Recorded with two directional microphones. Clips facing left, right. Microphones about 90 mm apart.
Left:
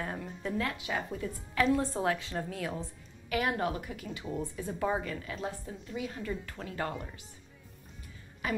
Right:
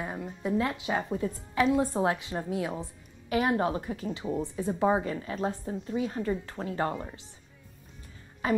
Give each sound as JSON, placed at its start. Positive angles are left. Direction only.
{"t": 0.0, "sound": "a woman's voice", "side_deg": -10}
{"t": 8.4, "sound": "a woman's voice", "side_deg": -30}